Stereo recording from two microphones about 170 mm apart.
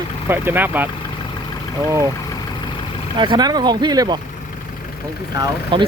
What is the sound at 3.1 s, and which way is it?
Speech, 25° right (ahead or behind).